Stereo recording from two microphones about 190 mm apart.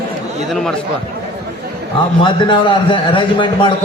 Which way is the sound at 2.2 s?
25° left (ahead or behind).